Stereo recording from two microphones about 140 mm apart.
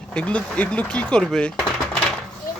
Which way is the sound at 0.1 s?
10° left (ahead or behind).